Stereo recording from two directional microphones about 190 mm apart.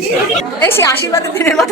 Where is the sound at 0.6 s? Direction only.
10° left (ahead or behind).